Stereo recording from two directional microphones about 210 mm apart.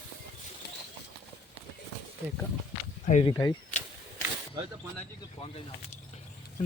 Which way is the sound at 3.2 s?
20° left (ahead or behind).